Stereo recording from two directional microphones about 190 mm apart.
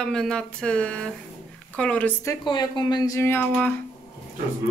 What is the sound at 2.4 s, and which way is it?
Speech, 25° left (ahead or behind).